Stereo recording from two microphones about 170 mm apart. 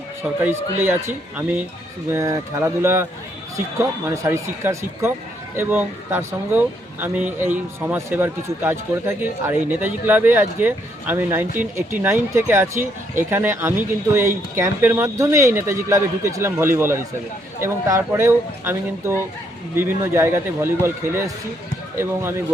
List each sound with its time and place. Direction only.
0.4 s a man's voice: 10° right (ahead or behind)